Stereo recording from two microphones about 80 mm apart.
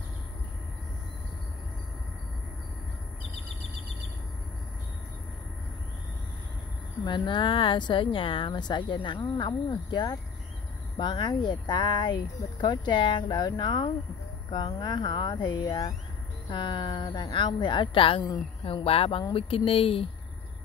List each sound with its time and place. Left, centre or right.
7.1 s speech: left
18.3 s speech: left